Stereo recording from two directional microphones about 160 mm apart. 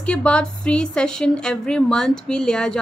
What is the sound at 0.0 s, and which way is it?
Speech, 5° left (ahead or behind).